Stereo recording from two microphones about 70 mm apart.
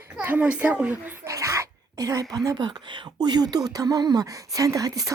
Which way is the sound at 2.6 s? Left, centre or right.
Right.